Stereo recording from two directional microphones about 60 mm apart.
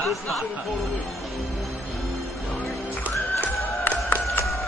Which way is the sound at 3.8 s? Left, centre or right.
Left.